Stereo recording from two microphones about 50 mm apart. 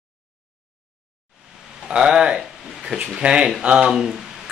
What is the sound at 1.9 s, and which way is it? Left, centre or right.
Speech, centre.